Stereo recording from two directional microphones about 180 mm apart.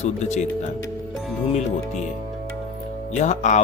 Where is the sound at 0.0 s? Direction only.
40° left (ahead or behind).